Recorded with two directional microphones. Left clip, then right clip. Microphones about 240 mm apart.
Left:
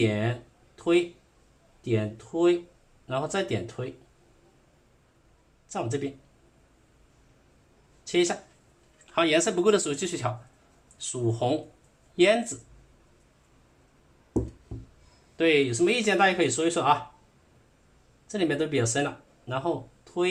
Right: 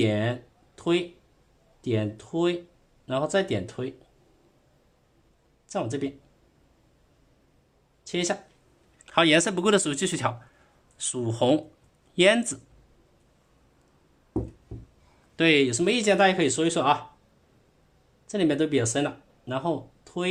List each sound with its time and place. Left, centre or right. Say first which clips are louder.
0.0 s speech: right 1 dB; right
1.8 s speech: even; right
5.6 s speech: right 1 dB; right
8.0 s speech: left 3 dB; right
15.4 s speech: right 1 dB; right
18.3 s speech: right 3 dB; right